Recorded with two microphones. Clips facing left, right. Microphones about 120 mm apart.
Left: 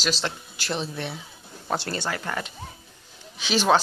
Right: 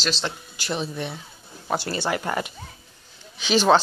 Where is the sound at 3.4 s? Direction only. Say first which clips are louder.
Right 3 dB; centre (ahead or behind).